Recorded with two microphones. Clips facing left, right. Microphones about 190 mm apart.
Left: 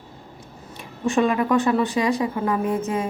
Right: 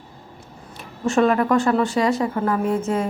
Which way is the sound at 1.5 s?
20° left (ahead or behind).